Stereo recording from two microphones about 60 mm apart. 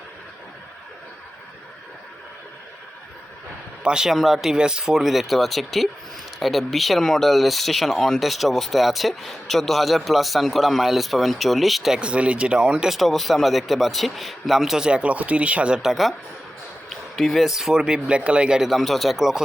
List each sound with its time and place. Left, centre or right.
3.8 s speech: centre
11.9 s speech: centre
13.0 s speech: centre
14.8 s speech: centre
15.8 s speech: centre
16.9 s a sound: centre
17.4 s speech: centre
18.7 s speech: centre